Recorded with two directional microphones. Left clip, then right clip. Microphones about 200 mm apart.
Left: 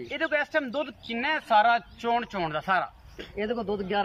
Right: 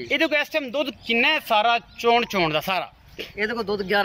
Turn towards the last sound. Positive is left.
turn(degrees=15)  # may be behind; listen again after turning